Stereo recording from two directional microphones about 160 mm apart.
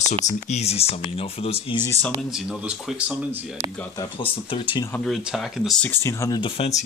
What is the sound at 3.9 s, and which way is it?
Speech, 30° left (ahead or behind).